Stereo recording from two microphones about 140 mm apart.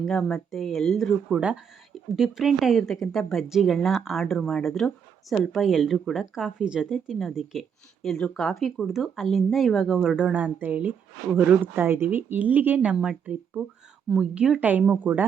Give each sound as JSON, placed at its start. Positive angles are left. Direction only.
{"t": 0.0, "sound": "speech", "side_deg": 5}